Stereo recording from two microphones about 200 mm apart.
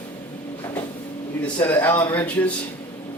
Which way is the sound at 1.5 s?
10° left (ahead or behind).